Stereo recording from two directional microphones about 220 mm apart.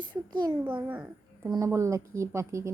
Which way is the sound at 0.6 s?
10° right (ahead or behind).